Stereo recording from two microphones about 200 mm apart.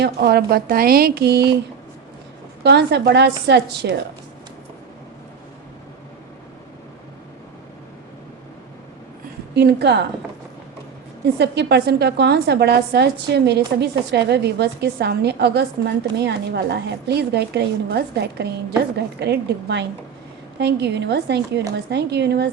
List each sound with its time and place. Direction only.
0.0 s speech: 55° right (ahead or behind)
2.6 s a woman's voice: 55° right (ahead or behind)
9.6 s a woman's voice: 55° right (ahead or behind)
11.3 s a woman's voice: 55° right (ahead or behind)